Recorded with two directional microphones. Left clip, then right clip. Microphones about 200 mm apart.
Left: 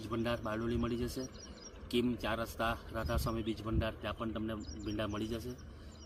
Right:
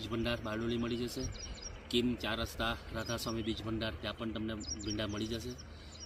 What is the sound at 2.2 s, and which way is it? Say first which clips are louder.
Speech: left 1 dB; centre (ahead or behind).